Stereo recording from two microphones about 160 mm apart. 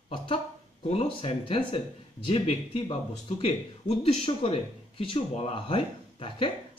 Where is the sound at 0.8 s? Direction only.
40° left (ahead or behind).